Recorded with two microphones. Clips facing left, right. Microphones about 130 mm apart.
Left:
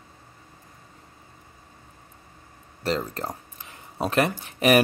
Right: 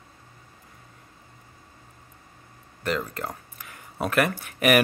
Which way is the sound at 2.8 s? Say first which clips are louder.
Left 1 dB; 35° left (ahead or behind).